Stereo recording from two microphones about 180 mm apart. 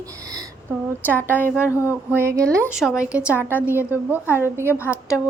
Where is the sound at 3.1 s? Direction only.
10° right (ahead or behind).